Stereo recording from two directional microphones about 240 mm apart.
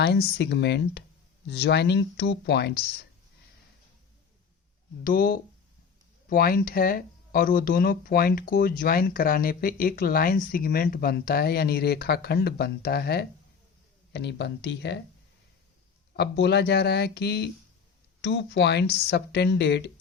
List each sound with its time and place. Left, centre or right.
0.0 s speech: left
5.0 s speech: left
16.1 s speech: left